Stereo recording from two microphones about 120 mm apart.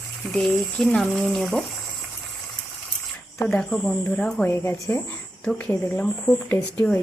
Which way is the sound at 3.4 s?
5° left (ahead or behind).